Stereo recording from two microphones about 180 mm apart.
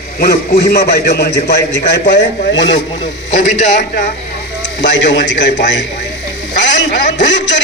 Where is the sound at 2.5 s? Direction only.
80° left.